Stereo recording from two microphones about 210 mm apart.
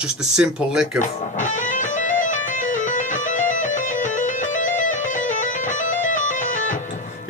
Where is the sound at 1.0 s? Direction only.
35° left (ahead or behind).